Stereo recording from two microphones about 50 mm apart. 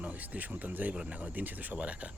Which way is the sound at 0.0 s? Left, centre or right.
Right.